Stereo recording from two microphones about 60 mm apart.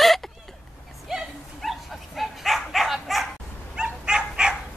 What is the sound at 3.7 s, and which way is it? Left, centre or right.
Dog, centre.